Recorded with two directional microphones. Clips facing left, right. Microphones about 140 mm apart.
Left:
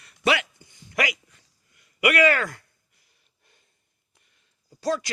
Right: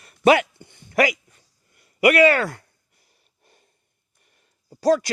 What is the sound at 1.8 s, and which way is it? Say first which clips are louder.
Speech: right 5 dB; 35° right (ahead or behind).